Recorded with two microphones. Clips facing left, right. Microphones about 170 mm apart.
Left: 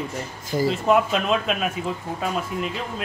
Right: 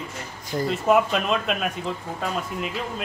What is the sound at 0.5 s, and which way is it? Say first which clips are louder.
Speech: left 1 dB; centre (ahead or behind).